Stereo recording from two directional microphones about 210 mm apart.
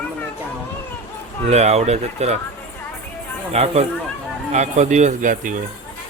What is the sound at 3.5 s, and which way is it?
Speech, 30° right (ahead or behind).